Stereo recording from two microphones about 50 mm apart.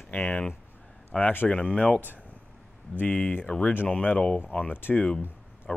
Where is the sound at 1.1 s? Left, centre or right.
Centre.